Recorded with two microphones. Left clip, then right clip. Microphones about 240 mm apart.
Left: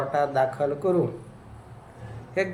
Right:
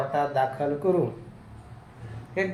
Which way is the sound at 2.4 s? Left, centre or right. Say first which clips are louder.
Left 2 dB; centre.